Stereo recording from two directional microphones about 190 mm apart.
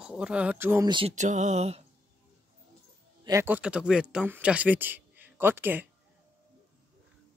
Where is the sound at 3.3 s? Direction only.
10° right (ahead or behind).